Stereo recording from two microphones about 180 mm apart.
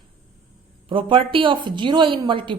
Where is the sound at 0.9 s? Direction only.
30° right (ahead or behind).